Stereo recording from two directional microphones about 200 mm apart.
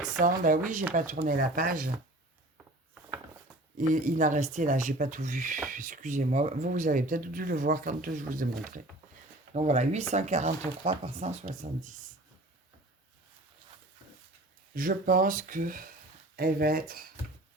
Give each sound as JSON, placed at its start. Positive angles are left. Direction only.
{"t": 0.2, "sound": "speech", "side_deg": -40}
{"t": 3.8, "sound": "speech", "side_deg": -40}
{"t": 14.8, "sound": "speech", "side_deg": -45}